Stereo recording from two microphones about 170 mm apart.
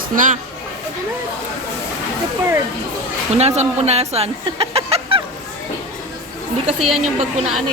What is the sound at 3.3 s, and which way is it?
Speech, 40° right (ahead or behind).